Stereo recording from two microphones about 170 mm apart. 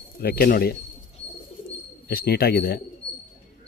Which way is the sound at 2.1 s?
65° left (ahead or behind).